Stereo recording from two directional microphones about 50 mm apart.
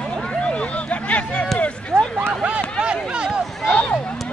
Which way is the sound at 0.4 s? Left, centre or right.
Left.